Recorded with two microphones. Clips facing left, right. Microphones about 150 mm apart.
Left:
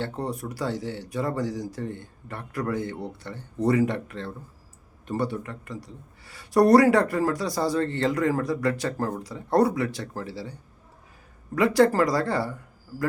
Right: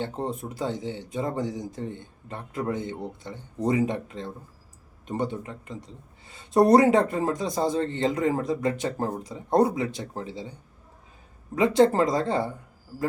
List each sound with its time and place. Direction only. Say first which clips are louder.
0.0 s speech: even; 20° right (ahead or behind)